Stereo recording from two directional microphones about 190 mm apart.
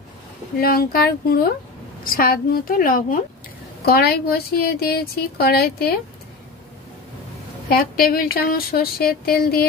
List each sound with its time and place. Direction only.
0.6 s speech: 50° left (ahead or behind)
7.7 s speech: 50° left (ahead or behind)